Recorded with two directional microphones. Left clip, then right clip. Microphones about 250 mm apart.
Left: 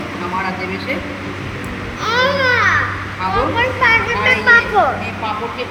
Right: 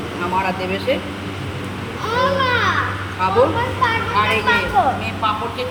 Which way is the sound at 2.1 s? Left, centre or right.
Left.